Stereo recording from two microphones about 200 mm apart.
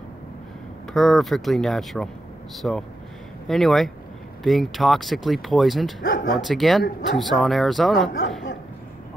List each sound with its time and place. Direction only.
0.9 s speech: centre (ahead or behind)
6.0 s speech: 45° left (ahead or behind)
6.3 s speech: centre (ahead or behind)